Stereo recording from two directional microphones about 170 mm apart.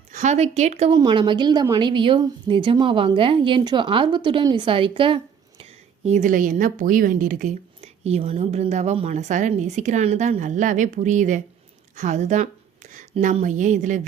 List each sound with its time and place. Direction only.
0.1 s a woman's voice: 40° right (ahead or behind)
0.9 s a woman's voice: 25° right (ahead or behind); by 14.0 s 45° right (ahead or behind)